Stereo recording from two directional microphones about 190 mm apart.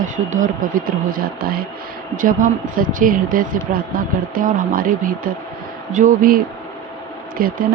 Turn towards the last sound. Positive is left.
turn(degrees=-50)  # may be behind; listen again after turning